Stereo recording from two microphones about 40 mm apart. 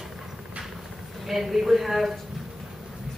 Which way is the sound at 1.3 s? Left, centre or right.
Centre.